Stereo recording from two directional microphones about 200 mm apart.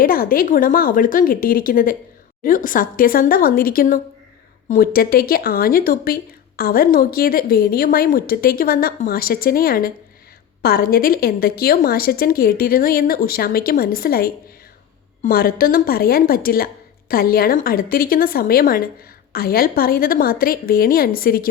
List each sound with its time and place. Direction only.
0.0 s a woman's voice: 45° left (ahead or behind)